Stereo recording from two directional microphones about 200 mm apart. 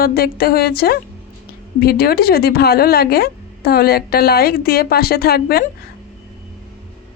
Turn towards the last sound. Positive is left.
turn(degrees=50)  # may be behind; listen again after turning